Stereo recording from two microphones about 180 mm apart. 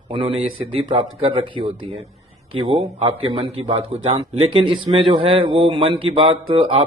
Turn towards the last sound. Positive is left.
turn(degrees=-30)  # may be behind; listen again after turning